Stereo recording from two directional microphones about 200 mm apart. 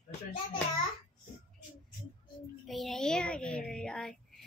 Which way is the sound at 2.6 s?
Centre (ahead or behind).